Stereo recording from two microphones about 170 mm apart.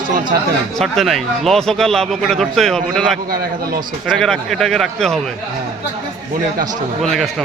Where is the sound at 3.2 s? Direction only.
60° right (ahead or behind).